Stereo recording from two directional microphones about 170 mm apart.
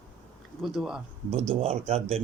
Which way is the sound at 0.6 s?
Centre (ahead or behind).